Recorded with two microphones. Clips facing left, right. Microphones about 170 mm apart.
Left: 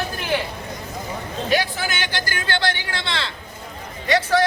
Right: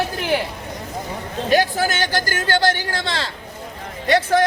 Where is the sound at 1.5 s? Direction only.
45° right (ahead or behind).